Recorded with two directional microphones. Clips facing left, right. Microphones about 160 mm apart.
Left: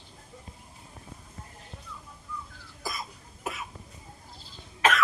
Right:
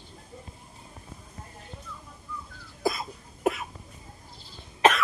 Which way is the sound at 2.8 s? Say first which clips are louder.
Right 9 dB; 60° right (ahead or behind).